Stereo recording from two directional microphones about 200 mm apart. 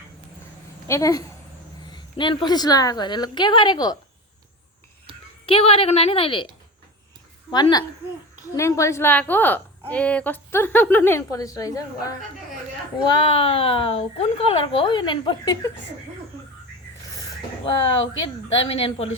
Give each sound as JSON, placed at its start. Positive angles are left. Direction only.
{"t": 0.9, "sound": "a woman's voice", "side_deg": 15}
{"t": 5.5, "sound": "speech", "side_deg": 30}
{"t": 7.5, "sound": "a woman's voice", "side_deg": 20}
{"t": 13.1, "sound": "speech", "side_deg": 30}
{"t": 18.6, "sound": "speech", "side_deg": 25}